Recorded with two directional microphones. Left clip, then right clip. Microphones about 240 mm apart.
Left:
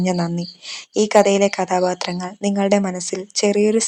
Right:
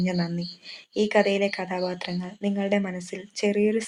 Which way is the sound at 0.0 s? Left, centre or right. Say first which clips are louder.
Left 7 dB; left.